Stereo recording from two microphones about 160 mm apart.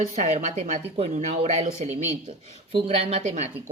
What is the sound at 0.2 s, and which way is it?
A woman's voice, 45° right (ahead or behind).